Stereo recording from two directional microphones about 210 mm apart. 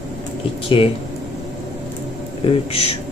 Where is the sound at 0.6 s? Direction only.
25° left (ahead or behind).